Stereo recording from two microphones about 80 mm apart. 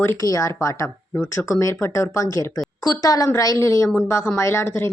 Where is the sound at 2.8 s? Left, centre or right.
Left.